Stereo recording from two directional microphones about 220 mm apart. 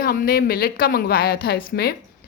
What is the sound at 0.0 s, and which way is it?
Speech, 40° left (ahead or behind).